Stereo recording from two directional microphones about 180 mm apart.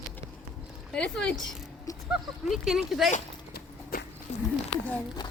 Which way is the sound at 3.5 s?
50° left (ahead or behind).